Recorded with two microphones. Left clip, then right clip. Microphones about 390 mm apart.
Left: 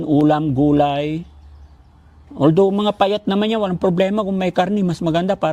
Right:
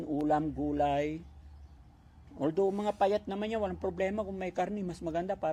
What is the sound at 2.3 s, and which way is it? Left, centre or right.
A man's voice, left.